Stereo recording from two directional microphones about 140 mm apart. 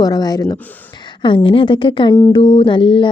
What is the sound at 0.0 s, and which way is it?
Speech, 25° left (ahead or behind).